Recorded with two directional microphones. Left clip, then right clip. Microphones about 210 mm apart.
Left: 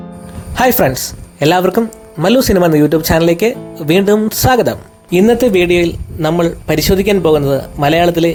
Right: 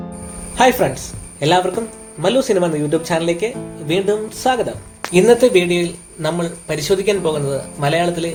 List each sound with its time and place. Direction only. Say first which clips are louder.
0.5 s speech: left 2 dB; 55° left (ahead or behind)